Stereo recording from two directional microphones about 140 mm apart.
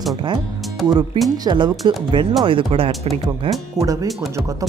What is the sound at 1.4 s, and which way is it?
Speech, 35° right (ahead or behind).